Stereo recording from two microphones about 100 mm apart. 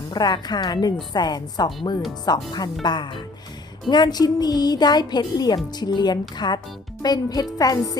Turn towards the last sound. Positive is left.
turn(degrees=35)  # may be behind; listen again after turning